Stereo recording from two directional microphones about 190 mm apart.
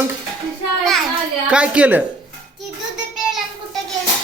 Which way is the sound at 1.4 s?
5° right (ahead or behind).